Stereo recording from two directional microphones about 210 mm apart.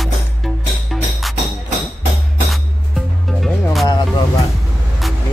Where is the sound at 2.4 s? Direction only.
Centre (ahead or behind).